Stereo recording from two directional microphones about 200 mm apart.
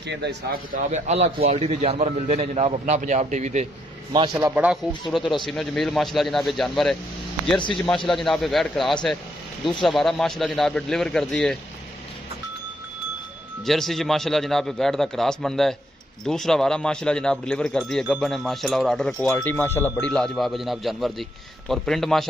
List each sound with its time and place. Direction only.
0.1 s speech: 55° right (ahead or behind)
0.9 s a man's voice: 35° right (ahead or behind)
4.1 s a man's voice: 20° right (ahead or behind)
4.6 s speech: centre (ahead or behind)
13.7 s speech: centre (ahead or behind)